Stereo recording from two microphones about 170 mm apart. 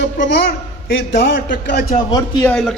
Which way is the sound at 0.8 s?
80° left.